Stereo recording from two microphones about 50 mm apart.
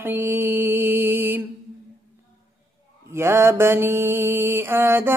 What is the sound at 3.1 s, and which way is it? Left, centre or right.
Mantra, right.